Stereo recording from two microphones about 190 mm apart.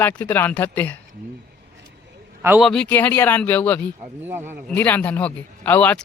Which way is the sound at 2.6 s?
5° left (ahead or behind).